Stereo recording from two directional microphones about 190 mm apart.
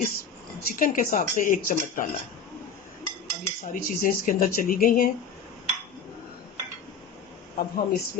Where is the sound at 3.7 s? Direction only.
45° left (ahead or behind).